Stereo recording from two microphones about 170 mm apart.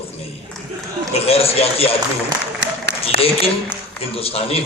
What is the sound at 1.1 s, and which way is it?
Speech, 35° left (ahead or behind).